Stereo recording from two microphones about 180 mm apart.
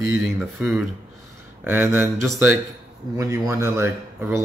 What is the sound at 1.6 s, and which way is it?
Speech, 10° right (ahead or behind).